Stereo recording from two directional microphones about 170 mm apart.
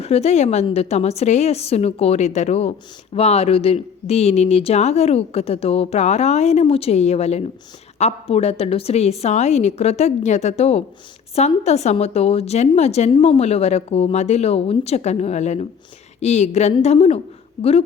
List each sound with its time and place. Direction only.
0.0 s a woman's voice: 40° left (ahead or behind)